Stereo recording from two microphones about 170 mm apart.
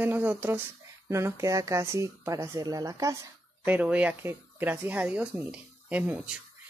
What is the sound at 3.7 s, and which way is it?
Speech, 10° right (ahead or behind).